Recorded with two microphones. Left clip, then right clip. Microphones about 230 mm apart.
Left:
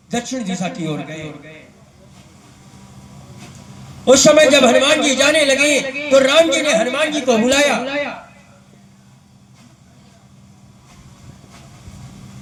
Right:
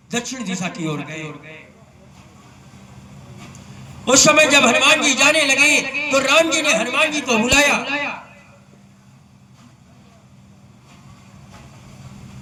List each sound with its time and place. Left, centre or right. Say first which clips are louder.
0.1 s a man's voice: left 2 dB; right
4.0 s a man's voice: left 3 dB; right